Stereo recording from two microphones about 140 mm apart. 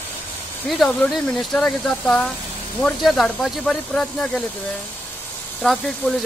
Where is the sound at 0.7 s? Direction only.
Centre (ahead or behind).